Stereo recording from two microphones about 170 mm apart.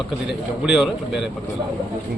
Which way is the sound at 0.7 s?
5° right (ahead or behind).